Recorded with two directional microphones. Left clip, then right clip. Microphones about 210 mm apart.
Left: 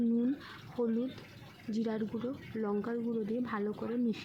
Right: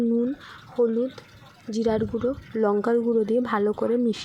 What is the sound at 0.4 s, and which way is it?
Speech, 20° right (ahead or behind).